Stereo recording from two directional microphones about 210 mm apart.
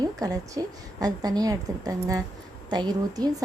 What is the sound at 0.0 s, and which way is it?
A woman's voice, 15° right (ahead or behind).